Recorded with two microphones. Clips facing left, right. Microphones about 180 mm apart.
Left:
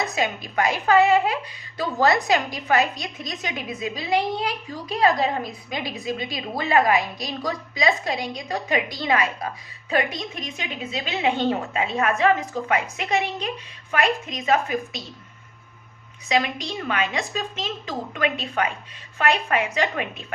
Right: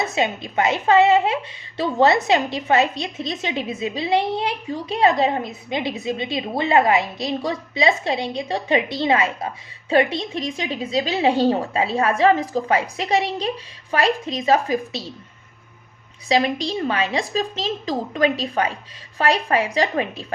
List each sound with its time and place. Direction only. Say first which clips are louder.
0.0 s a woman's voice: right 3 dB; 25° right (ahead or behind)
16.3 s a woman's voice: right 4 dB; 35° right (ahead or behind)